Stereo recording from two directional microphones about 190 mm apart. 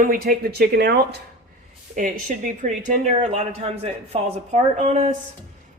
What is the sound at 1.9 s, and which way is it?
Speech, 45° right (ahead or behind).